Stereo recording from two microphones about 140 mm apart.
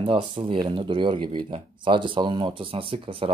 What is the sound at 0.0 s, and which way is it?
Speech, 40° right (ahead or behind).